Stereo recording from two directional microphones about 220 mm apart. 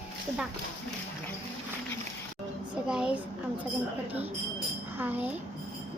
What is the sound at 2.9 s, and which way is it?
Speech, 5° right (ahead or behind).